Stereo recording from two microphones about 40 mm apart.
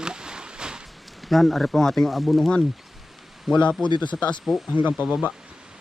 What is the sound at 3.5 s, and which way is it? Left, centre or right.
Speech, left.